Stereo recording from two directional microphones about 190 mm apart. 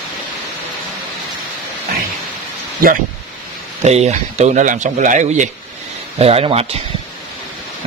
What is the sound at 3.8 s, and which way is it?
Speech, 35° right (ahead or behind).